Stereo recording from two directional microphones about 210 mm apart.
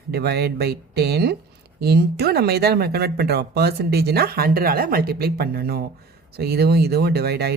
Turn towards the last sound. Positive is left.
turn(degrees=-50)  # may be behind; listen again after turning